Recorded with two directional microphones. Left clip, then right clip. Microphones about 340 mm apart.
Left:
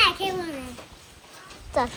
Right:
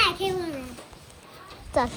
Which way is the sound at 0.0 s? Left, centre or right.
Centre.